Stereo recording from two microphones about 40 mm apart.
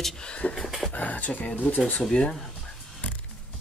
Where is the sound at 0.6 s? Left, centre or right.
Centre.